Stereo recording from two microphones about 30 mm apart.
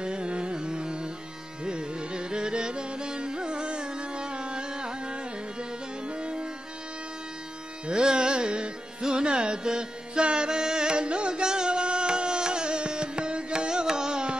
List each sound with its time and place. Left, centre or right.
0.0 s carnatic music: right
7.8 s music: right
9.1 s carnatic music: right
11.4 s music: right